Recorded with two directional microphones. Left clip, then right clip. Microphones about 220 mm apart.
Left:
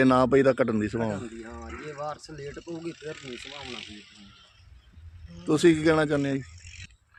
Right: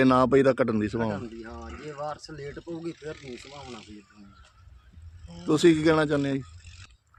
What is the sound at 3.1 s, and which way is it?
Speech, 50° right (ahead or behind).